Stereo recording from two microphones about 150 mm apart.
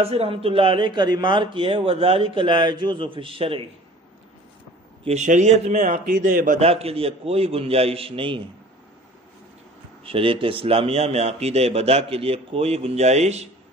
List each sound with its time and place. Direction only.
0.0 s speech: 40° right (ahead or behind)
5.0 s a man's voice: 50° right (ahead or behind)
6.6 s speech: 40° right (ahead or behind)
10.0 s a man's voice: 35° right (ahead or behind)